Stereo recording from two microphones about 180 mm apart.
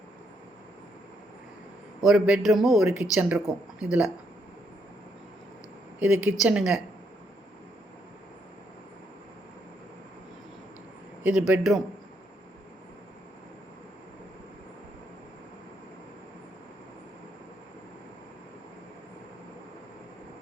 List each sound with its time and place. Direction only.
2.0 s a man's voice: centre (ahead or behind)
6.0 s a woman's voice: 5° right (ahead or behind)
11.2 s a man's voice: 5° right (ahead or behind)